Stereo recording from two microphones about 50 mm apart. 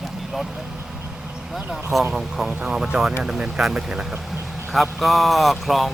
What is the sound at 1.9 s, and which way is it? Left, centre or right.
Speech, centre.